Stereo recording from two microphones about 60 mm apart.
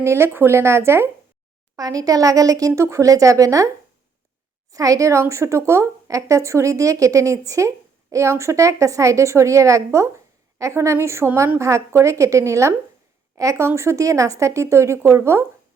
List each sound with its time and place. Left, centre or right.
0.0 s speech: right
1.7 s speech: right
2.8 s speech: right
4.7 s a woman's voice: right
6.1 s a woman's voice: right